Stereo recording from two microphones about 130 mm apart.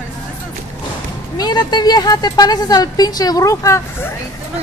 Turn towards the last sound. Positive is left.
turn(degrees=25)  # may be behind; listen again after turning